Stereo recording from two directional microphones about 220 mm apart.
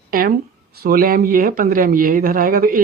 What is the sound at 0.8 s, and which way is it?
Speech, 40° right (ahead or behind).